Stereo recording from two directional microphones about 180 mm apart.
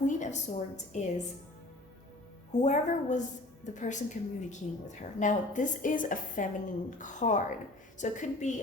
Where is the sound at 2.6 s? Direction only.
40° left (ahead or behind).